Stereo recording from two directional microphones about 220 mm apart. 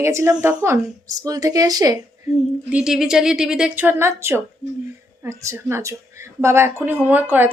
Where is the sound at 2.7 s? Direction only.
5° right (ahead or behind).